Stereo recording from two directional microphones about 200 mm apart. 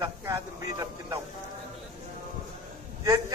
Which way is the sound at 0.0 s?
15° right (ahead or behind).